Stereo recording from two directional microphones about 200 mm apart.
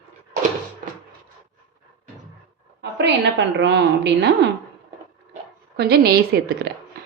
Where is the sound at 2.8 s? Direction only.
60° right (ahead or behind).